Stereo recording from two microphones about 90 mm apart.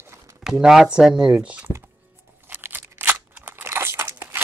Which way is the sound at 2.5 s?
25° right (ahead or behind).